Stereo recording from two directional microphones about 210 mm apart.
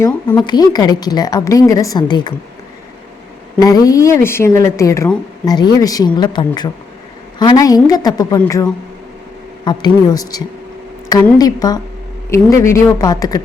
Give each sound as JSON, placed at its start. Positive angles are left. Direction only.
{"t": 0.0, "sound": "a woman's voice", "side_deg": 20}
{"t": 3.6, "sound": "a woman's voice", "side_deg": 15}